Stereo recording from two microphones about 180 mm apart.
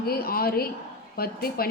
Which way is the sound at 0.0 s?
55° left (ahead or behind).